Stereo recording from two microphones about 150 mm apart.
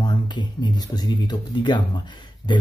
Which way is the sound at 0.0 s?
30° left (ahead or behind).